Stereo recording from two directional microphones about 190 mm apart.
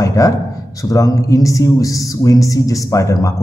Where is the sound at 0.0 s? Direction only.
15° left (ahead or behind).